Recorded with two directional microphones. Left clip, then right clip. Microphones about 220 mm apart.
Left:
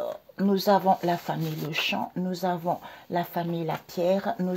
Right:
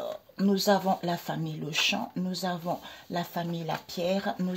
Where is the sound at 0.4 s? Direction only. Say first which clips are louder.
Left 3 dB; 15° left (ahead or behind).